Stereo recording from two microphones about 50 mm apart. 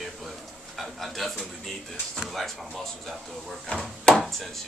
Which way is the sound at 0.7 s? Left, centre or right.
Centre.